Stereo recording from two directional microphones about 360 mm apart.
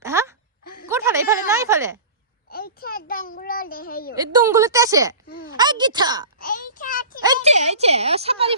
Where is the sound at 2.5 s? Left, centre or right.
Left.